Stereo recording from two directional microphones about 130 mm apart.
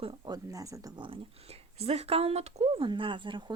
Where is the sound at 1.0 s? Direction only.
50° right (ahead or behind).